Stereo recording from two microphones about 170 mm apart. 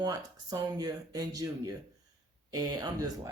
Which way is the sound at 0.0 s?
25° right (ahead or behind).